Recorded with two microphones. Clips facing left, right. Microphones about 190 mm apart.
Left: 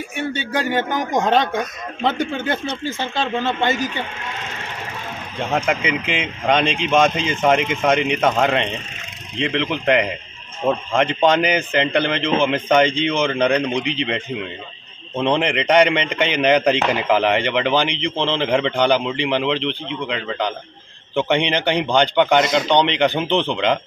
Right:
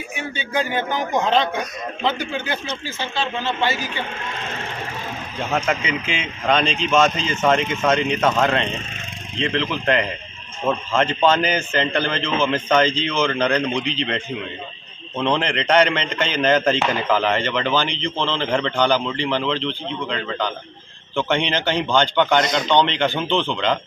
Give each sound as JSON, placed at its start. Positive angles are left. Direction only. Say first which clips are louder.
{"t": 1.1, "sound": "speech", "louder": "left 2 dB", "side_deg": 45}
{"t": 5.5, "sound": "speech", "louder": "left 2 dB", "side_deg": 10}
{"t": 15.1, "sound": "a man's voice", "louder": "left 2 dB", "side_deg": 15}
{"t": 22.8, "sound": "speech", "louder": "left 2 dB", "side_deg": 15}